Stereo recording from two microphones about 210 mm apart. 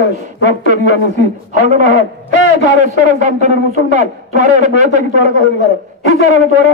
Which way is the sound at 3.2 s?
35° right (ahead or behind).